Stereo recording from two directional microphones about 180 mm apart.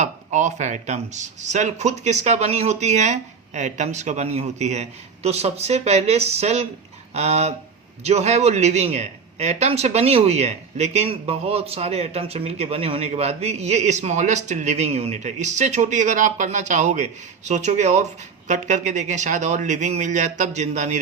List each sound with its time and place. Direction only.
0.0 s speech: 40° right (ahead or behind)